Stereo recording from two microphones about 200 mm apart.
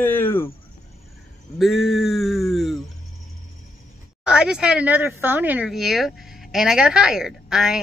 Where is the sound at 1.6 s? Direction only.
Centre (ahead or behind).